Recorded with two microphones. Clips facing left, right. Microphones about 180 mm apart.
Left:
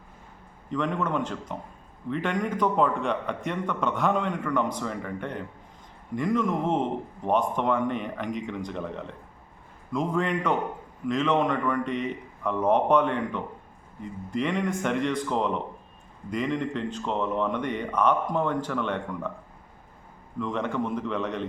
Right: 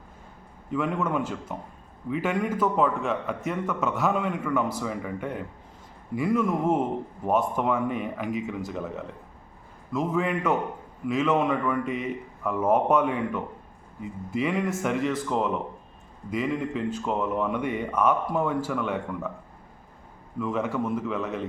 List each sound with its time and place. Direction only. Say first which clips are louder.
0.7 s a man's voice: right 1 dB; 10° right (ahead or behind)
20.4 s a man's voice: right 1 dB; 5° right (ahead or behind)